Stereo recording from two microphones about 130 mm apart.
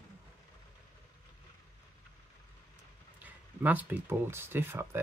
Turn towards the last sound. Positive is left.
turn(degrees=-15)  # may be behind; listen again after turning